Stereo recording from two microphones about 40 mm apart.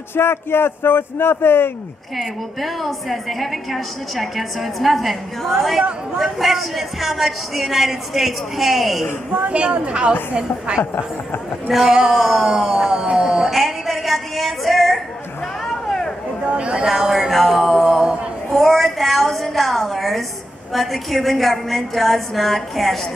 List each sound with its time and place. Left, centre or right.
0.1 s speech: left
2.1 s a woman's voice: centre
9.3 s a woman's voice: right
11.9 s speech: centre
12.2 s a woman's voice: centre
12.4 s speech: centre
13.5 s a sound: centre
16.5 s a woman's voice: right
16.8 s speech: centre
17.3 s music: centre
18.5 s a woman's voice: centre